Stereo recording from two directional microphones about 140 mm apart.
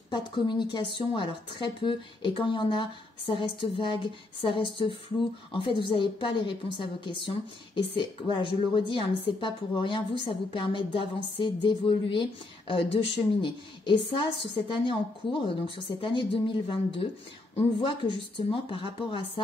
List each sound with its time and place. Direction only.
0.1 s a woman's voice: 35° left (ahead or behind)